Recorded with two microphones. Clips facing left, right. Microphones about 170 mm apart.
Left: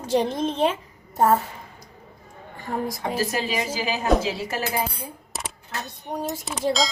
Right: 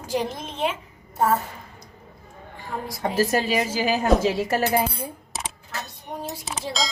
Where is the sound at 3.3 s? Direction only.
45° right (ahead or behind).